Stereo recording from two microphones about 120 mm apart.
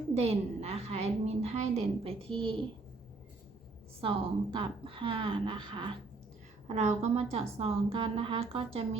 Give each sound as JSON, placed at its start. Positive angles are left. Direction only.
{"t": 0.1, "sound": "speech", "side_deg": -60}
{"t": 4.0, "sound": "a woman's voice", "side_deg": -50}
{"t": 6.7, "sound": "speech", "side_deg": -70}